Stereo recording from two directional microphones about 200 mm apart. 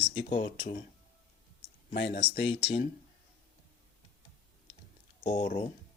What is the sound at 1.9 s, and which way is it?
Speech, 55° left (ahead or behind).